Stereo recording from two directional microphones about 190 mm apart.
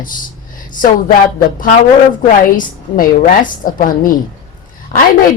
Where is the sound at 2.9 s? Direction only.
45° left (ahead or behind).